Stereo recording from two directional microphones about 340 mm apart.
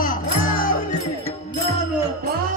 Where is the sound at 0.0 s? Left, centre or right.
Left.